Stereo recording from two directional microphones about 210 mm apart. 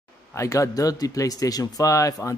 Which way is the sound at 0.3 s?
15° left (ahead or behind).